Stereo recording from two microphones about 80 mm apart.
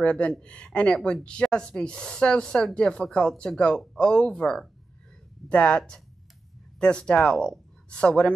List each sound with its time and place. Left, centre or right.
0.0 s speech: centre